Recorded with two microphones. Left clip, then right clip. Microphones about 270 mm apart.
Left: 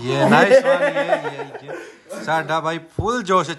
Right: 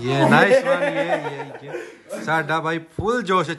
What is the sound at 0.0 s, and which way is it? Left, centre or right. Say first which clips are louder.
Speech: left 1 dB; centre.